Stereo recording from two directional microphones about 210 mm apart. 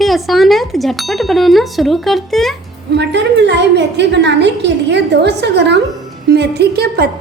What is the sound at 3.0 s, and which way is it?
A woman's voice, 55° right (ahead or behind).